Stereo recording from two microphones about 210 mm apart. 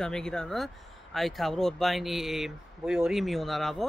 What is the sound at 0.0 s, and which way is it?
Speech, 5° left (ahead or behind).